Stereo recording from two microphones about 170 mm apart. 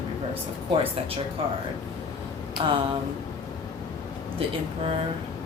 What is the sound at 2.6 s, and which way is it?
Speech, 30° right (ahead or behind).